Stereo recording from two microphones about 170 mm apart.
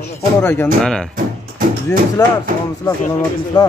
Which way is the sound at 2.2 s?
20° left (ahead or behind).